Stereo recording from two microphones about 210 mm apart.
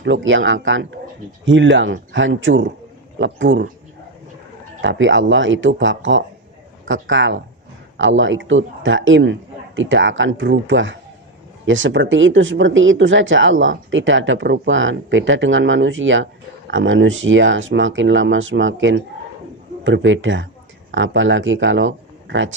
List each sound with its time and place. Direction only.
0.0 s speech: 60° right (ahead or behind)
4.8 s speech: 60° right (ahead or behind)